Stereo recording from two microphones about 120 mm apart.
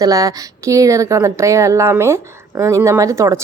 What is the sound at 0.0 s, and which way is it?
Speech, 30° right (ahead or behind).